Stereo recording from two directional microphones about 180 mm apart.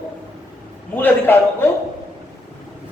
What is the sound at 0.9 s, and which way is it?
Speech, 10° left (ahead or behind).